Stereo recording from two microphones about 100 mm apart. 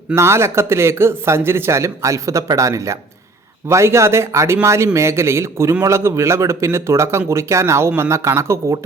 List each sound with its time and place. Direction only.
0.1 s speech: 25° right (ahead or behind)